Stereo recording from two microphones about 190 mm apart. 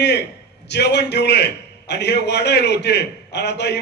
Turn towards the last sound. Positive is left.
turn(degrees=60)  # may be behind; listen again after turning